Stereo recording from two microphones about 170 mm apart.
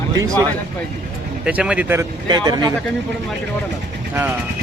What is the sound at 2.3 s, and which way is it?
Speech, 25° right (ahead or behind).